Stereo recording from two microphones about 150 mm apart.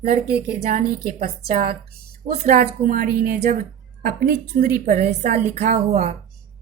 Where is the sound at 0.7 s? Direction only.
70° right (ahead or behind); by 4.7 s 55° right (ahead or behind).